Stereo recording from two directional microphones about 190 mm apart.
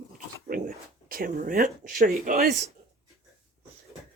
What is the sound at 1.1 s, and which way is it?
Speech, 50° right (ahead or behind).